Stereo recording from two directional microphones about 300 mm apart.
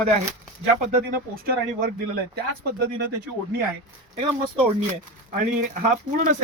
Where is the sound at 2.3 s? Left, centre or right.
Right.